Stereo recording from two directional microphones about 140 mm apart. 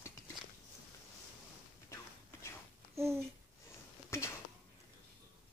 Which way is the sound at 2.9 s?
20° right (ahead or behind).